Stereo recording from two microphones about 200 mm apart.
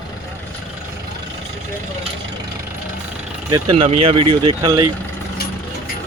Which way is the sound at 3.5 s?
20° right (ahead or behind).